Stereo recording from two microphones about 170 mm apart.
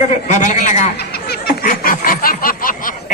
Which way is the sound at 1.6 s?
50° left (ahead or behind).